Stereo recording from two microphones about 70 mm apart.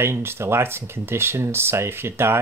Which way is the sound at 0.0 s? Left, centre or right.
Right.